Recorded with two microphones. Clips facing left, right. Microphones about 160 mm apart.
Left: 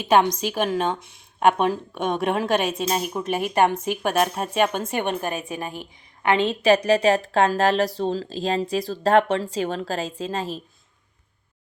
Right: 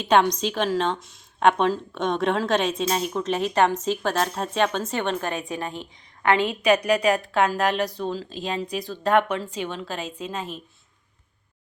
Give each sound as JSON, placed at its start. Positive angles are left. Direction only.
{"t": 0.3, "sound": "a woman's voice", "side_deg": 10}
{"t": 0.9, "sound": "speech", "side_deg": 60}
{"t": 1.4, "sound": "a woman's voice", "side_deg": 10}
{"t": 6.3, "sound": "a woman's voice", "side_deg": 25}